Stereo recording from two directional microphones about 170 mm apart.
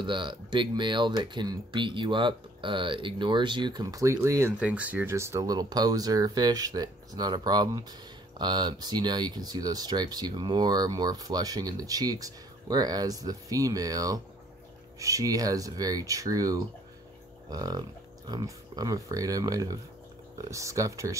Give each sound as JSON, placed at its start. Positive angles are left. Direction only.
{"t": 0.0, "sound": "speech", "side_deg": -30}